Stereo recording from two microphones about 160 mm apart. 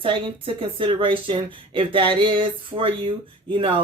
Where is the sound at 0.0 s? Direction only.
35° right (ahead or behind).